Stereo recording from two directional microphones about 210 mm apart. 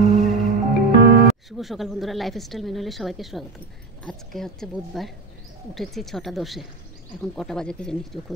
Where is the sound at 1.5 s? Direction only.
Centre (ahead or behind).